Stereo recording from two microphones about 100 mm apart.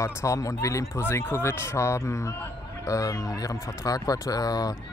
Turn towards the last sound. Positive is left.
turn(degrees=40)  # may be behind; listen again after turning